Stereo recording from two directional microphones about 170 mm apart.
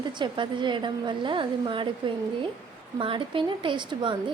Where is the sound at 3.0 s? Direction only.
30° right (ahead or behind).